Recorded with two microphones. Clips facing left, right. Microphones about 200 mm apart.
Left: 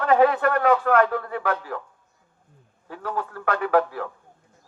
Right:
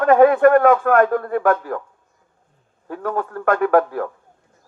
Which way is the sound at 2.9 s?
50° right (ahead or behind).